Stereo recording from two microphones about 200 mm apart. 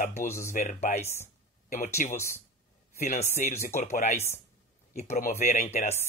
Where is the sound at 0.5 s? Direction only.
35° left (ahead or behind).